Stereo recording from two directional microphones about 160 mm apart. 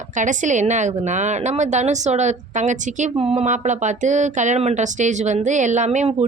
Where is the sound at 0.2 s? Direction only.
50° right (ahead or behind).